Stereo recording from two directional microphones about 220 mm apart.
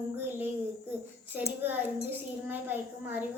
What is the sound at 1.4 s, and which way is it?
A child's voice, 10° right (ahead or behind).